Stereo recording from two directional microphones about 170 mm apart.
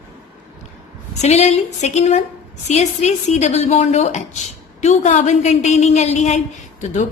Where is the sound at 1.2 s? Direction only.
40° left (ahead or behind).